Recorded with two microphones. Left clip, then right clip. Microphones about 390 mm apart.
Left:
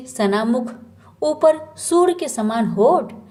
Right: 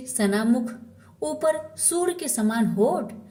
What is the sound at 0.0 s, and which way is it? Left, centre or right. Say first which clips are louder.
A woman's voice: left 5 dB; right.